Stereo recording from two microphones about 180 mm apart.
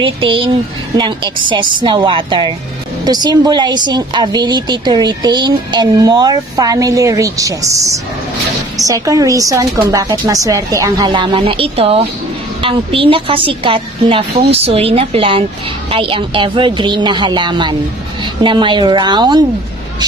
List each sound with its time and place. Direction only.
0.0 s a woman's voice: 30° right (ahead or behind)